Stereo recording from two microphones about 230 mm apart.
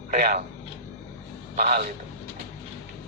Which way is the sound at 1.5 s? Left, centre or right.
Right.